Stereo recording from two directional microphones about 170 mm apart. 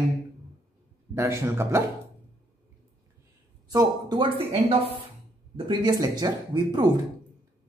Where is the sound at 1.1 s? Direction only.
15° right (ahead or behind).